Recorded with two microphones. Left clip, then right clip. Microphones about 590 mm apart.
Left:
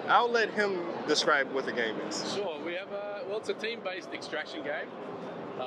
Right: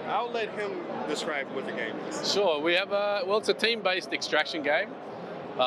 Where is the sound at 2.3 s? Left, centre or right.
Right.